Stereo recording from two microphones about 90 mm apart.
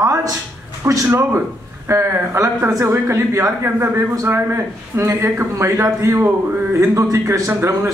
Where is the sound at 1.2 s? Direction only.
25° right (ahead or behind).